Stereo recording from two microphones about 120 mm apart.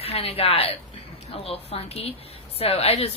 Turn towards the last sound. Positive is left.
turn(degrees=60)  # may be behind; listen again after turning